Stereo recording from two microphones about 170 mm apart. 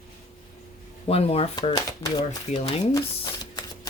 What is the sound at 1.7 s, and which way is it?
Speech, 20° left (ahead or behind).